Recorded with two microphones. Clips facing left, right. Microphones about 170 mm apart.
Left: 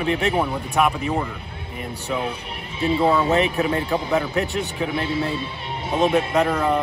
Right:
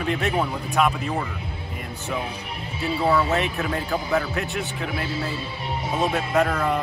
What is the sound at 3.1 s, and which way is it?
Speech, 20° left (ahead or behind).